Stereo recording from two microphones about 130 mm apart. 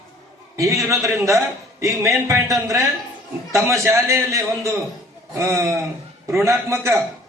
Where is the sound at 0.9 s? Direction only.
25° right (ahead or behind).